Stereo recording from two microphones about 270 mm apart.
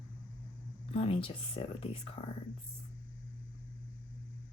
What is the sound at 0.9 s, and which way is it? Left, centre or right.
Speech, left.